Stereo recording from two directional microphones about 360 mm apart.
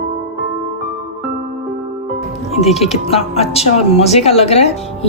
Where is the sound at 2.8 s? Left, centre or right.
Centre.